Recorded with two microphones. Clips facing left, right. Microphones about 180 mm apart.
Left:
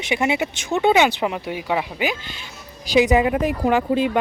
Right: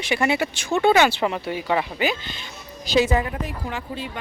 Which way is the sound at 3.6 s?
90° left.